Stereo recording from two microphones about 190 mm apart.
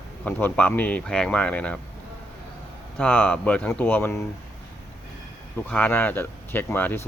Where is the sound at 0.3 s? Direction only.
10° left (ahead or behind).